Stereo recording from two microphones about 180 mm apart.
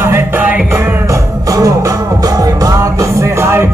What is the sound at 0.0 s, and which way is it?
Music, 10° right (ahead or behind).